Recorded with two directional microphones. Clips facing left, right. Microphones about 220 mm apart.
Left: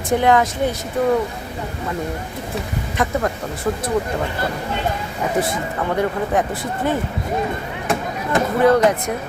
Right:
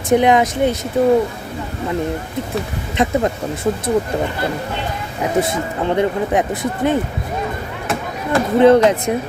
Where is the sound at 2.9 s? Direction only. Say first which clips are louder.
Right 4 dB; 20° right (ahead or behind).